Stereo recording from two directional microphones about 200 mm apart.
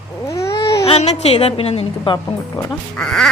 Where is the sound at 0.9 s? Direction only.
30° left (ahead or behind).